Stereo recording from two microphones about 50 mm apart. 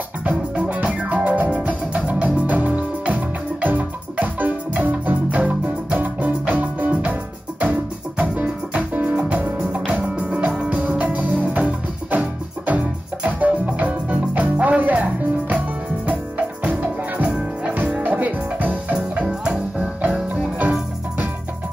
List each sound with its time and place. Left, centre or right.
0.2 s music: right
8.2 s music: right
16.6 s music: right
18.0 s music: right
19.2 s music: centre